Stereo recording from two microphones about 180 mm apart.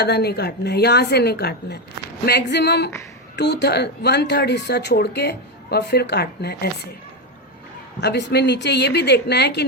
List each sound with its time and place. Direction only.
0.0 s speech: 65° left (ahead or behind)
8.0 s speech: 70° left (ahead or behind)